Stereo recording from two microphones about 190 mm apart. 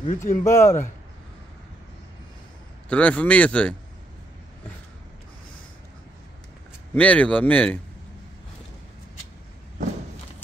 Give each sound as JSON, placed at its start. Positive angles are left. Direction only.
{"t": 0.0, "sound": "speech", "side_deg": 40}
{"t": 0.4, "sound": "speech", "side_deg": 15}
{"t": 2.9, "sound": "speech", "side_deg": 5}
{"t": 6.9, "sound": "speech", "side_deg": 5}